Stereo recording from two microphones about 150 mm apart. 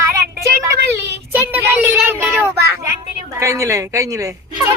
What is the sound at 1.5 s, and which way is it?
A woman's voice, 15° right (ahead or behind).